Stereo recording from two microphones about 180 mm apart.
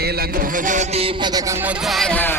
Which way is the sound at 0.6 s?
45° right (ahead or behind).